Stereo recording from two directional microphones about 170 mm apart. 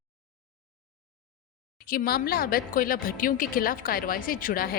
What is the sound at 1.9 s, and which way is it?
A woman's voice, 60° left (ahead or behind).